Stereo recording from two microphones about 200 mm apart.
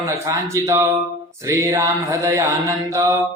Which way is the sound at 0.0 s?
15° right (ahead or behind).